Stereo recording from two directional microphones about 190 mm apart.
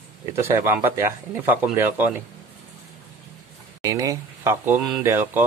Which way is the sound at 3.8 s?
15° right (ahead or behind).